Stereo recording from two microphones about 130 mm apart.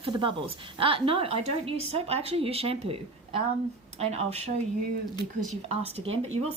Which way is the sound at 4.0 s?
55° right (ahead or behind).